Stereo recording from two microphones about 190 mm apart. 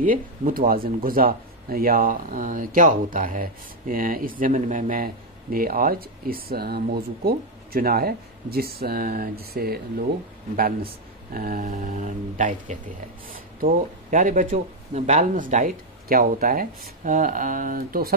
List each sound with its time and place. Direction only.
0.0 s speech: 45° right (ahead or behind)